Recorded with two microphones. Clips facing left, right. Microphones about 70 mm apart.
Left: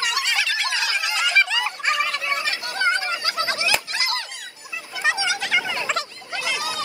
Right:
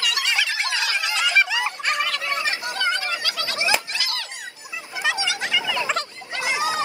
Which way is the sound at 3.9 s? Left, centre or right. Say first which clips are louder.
Left 3 dB; left.